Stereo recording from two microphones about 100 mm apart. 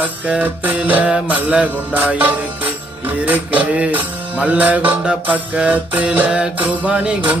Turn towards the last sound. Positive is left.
turn(degrees=-15)  # may be behind; listen again after turning